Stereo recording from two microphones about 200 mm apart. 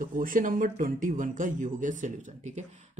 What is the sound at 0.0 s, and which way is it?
Speech, 45° right (ahead or behind).